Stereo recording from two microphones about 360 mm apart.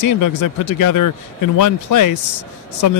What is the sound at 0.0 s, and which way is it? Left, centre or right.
Speech, left.